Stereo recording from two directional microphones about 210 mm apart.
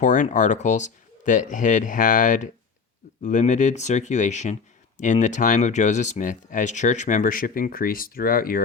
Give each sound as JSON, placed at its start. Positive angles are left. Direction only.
{"t": 0.0, "sound": "speech", "side_deg": 35}